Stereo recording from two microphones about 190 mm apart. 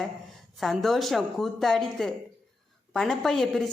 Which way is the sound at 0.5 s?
Centre (ahead or behind).